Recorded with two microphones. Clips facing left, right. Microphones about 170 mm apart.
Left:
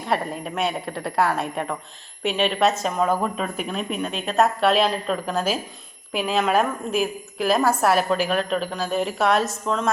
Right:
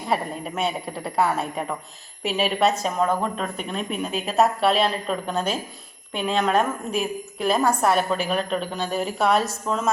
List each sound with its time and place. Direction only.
0.0 s a woman's voice: centre (ahead or behind)